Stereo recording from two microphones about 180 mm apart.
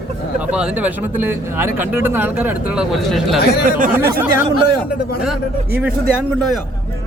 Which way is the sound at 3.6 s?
50° right (ahead or behind).